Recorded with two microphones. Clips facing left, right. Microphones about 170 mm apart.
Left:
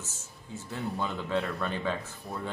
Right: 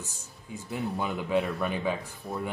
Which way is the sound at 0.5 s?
15° right (ahead or behind).